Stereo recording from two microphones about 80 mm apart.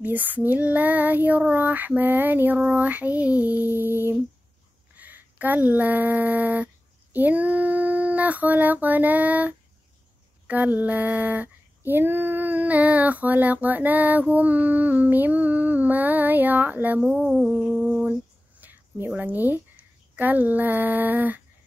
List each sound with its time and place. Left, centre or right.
0.0 s female singing: right
4.9 s speech: right
10.4 s female singing: centre
18.6 s a woman's voice: right